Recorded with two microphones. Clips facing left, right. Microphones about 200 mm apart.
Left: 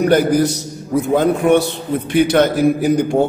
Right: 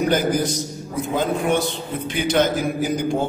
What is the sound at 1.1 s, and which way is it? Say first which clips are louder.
A man's voice: left 7 dB; 60° left (ahead or behind).